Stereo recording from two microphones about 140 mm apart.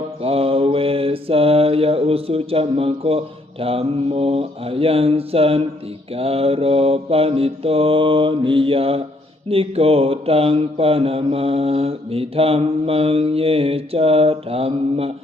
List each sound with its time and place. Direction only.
0.2 s mantra: 45° right (ahead or behind)